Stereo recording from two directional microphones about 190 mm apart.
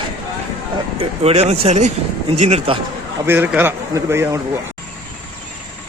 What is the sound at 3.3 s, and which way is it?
A man's voice, 10° right (ahead or behind).